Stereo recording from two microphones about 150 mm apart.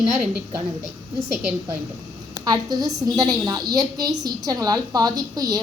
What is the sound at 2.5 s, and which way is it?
A woman's voice, 25° right (ahead or behind).